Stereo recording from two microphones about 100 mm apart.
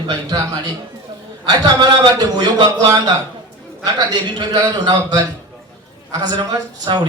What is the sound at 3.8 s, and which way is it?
A man's voice, 40° right (ahead or behind).